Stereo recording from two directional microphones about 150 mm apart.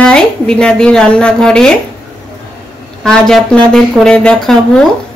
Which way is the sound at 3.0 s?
5° left (ahead or behind).